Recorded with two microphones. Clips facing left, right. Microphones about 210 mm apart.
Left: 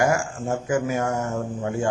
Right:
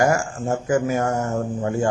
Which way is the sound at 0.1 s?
40° right (ahead or behind).